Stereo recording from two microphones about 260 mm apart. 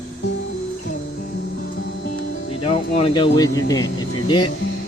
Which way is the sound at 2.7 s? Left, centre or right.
Left.